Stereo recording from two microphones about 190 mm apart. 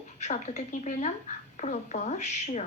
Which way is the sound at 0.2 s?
35° left (ahead or behind).